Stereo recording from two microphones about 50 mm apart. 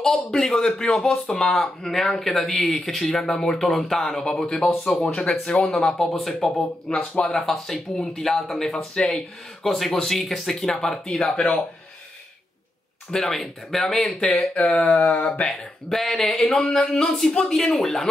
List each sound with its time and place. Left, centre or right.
0.0 s speech: centre
13.1 s speech: centre
14.5 s speech: centre